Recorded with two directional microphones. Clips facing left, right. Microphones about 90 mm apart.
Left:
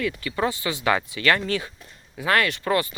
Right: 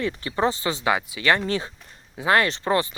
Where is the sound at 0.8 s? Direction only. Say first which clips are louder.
Left 1 dB; 15° right (ahead or behind).